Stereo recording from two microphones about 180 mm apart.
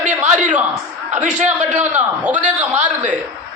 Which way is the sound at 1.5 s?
10° right (ahead or behind).